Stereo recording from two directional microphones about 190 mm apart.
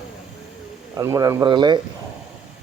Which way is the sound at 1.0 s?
15° right (ahead or behind).